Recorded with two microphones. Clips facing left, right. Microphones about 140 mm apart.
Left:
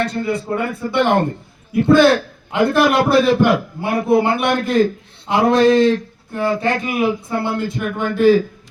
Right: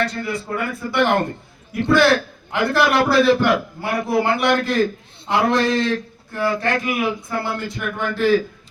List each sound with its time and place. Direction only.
0.0 s a man's voice: 25° left (ahead or behind)
5.3 s a sound: 15° left (ahead or behind)
6.3 s a man's voice: 20° left (ahead or behind)